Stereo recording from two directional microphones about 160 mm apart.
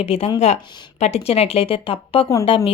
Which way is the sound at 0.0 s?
35° left (ahead or behind).